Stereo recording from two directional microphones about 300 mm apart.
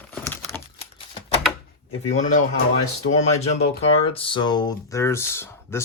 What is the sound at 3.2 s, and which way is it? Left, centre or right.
Speech, left.